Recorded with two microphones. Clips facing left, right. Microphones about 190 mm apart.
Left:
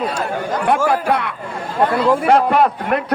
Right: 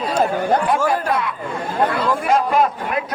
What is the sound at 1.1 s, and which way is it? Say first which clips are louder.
A man's voice: left 1 dB; 65° left (ahead or behind).